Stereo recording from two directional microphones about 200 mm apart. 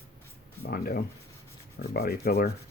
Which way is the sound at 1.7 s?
50° left (ahead or behind).